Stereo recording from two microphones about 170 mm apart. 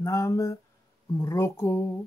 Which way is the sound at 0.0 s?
20° left (ahead or behind).